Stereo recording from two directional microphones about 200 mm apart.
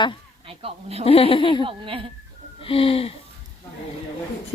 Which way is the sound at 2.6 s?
25° left (ahead or behind).